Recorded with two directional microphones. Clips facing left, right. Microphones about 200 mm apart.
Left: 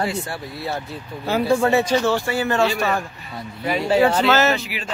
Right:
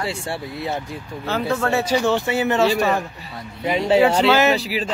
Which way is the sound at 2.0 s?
20° right (ahead or behind).